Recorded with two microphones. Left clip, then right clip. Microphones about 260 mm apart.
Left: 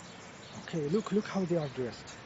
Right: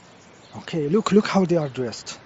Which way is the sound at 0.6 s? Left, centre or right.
Right.